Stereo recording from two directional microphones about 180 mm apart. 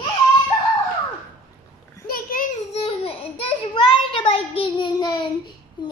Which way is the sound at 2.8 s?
35° left (ahead or behind).